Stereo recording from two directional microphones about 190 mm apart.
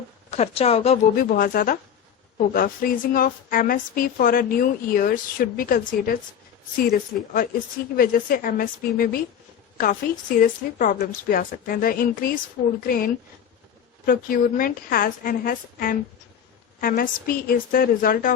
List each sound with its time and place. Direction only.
0.3 s a woman's voice: 35° left (ahead or behind)
1.1 s a woman's voice: 45° left (ahead or behind)
14.0 s a woman's voice: 50° left (ahead or behind)